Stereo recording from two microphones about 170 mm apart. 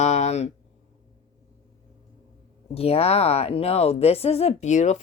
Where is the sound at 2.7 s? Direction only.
35° left (ahead or behind).